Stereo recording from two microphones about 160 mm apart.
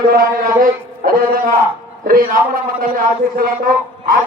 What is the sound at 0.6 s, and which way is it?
Music, 60° right (ahead or behind).